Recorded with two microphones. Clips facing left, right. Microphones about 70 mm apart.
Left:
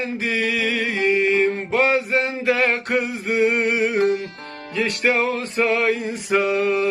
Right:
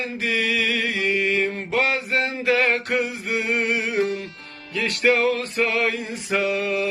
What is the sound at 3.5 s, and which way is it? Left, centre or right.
Music, centre.